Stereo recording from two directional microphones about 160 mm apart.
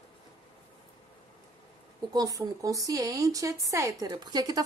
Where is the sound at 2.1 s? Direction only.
20° right (ahead or behind).